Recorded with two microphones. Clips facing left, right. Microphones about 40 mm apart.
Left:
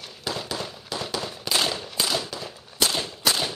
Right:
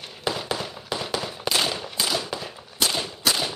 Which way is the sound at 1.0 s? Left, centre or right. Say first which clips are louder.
Right 2 dB; centre.